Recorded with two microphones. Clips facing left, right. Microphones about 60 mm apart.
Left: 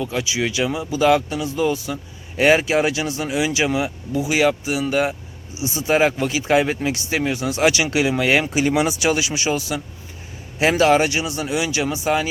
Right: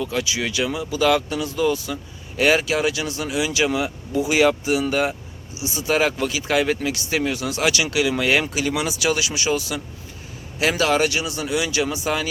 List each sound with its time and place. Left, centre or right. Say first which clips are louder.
0.0 s speech: left 1 dB; centre
5.5 s speech: left 3 dB; left
8.1 s speech: left 2 dB; centre